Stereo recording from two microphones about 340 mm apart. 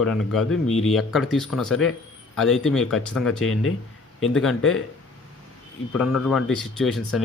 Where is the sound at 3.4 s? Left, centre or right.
Left.